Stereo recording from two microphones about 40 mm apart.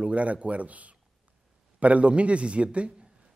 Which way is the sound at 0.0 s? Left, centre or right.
Right.